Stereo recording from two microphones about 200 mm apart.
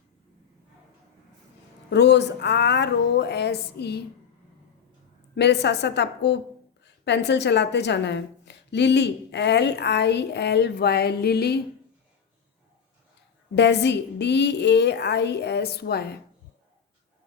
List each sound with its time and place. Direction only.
1.9 s a woman's voice: 60° left (ahead or behind)
5.3 s a woman's voice: 60° left (ahead or behind)
13.6 s a woman's voice: 60° left (ahead or behind)